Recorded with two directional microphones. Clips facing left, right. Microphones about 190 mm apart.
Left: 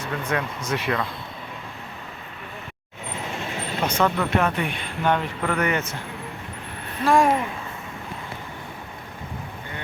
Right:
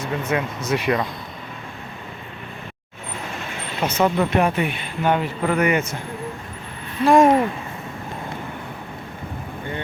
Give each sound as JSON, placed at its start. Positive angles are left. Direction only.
{"t": 0.0, "sound": "speech", "side_deg": -10}
{"t": 3.8, "sound": "speech", "side_deg": -5}
{"t": 7.0, "sound": "speech", "side_deg": -15}